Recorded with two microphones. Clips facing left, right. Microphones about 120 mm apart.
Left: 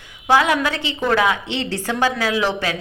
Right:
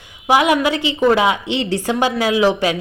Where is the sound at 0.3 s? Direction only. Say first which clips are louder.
Right 2 dB; 15° right (ahead or behind).